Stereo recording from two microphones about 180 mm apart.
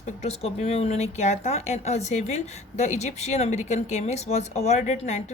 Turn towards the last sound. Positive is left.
turn(degrees=40)  # may be behind; listen again after turning